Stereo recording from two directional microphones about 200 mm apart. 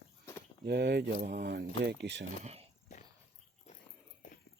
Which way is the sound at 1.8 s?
55° right (ahead or behind).